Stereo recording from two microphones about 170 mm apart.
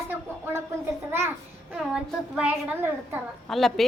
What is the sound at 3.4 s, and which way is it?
Speech, centre (ahead or behind).